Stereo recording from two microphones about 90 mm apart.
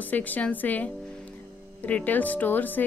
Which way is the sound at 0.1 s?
20° left (ahead or behind).